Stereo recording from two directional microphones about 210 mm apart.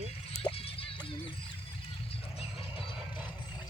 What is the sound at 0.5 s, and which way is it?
Music, 25° left (ahead or behind).